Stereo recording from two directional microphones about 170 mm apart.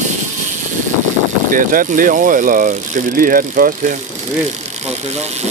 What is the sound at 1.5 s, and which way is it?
Speech, 55° right (ahead or behind).